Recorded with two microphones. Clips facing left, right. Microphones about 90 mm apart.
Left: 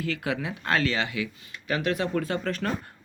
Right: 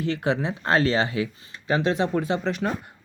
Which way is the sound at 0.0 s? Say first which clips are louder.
Right 5 dB; 25° right (ahead or behind).